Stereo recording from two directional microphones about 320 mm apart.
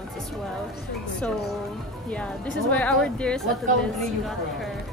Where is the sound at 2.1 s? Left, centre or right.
Centre.